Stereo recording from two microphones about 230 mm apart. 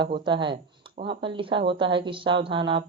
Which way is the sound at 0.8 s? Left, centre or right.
Right.